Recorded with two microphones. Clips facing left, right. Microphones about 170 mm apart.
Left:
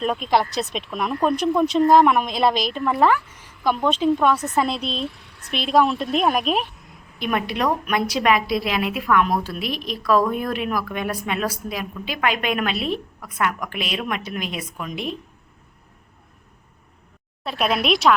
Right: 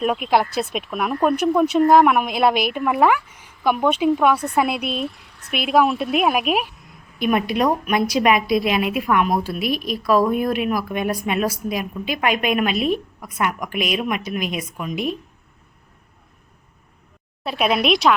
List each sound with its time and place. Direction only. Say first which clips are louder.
0.0 s a woman's voice: right 2 dB; 10° right (ahead or behind)
17.4 s speech: right 2 dB; 5° right (ahead or behind)